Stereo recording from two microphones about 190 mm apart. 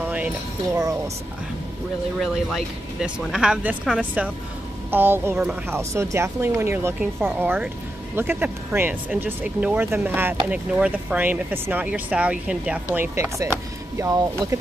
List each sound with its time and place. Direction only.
0.0 s a sound: 10° right (ahead or behind)
0.7 s speech: 20° right (ahead or behind)
2.1 s speech: centre (ahead or behind); by 14.6 s 20° right (ahead or behind)